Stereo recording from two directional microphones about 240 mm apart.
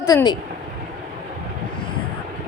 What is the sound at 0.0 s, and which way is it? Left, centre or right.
Speech, centre.